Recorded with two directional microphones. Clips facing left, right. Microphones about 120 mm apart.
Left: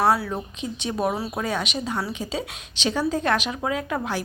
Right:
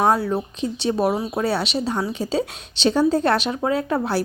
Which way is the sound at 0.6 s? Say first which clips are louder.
Right 4 dB; 35° right (ahead or behind).